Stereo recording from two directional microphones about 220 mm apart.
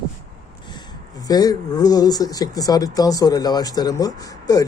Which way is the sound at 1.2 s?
15° left (ahead or behind).